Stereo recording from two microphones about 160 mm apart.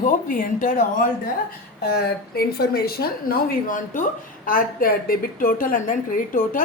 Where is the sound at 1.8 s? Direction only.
75° left (ahead or behind).